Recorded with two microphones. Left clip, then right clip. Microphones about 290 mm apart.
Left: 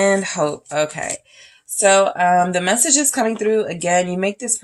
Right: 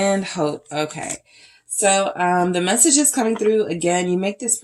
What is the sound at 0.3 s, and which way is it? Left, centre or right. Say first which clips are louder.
Speech: left 3 dB; left.